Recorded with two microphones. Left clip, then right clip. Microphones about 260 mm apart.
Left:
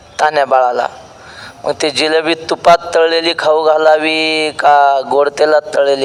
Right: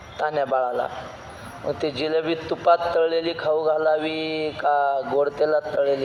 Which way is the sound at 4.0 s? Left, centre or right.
Left.